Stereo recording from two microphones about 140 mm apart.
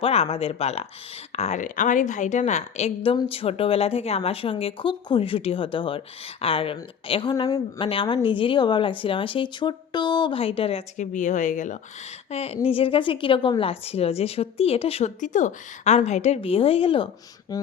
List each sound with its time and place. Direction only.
0.0 s a woman's voice: 45° left (ahead or behind)
10.9 s speech: 60° left (ahead or behind)
12.3 s a woman's voice: 50° left (ahead or behind)
15.2 s a woman's voice: 65° left (ahead or behind); by 17.1 s 40° left (ahead or behind)
17.5 s speech: 25° left (ahead or behind)